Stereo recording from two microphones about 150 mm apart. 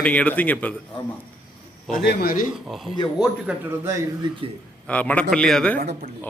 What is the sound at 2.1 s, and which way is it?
Speech, 75° left (ahead or behind).